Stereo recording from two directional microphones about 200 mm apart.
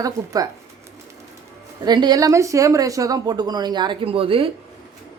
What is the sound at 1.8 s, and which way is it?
A woman's voice, 20° right (ahead or behind).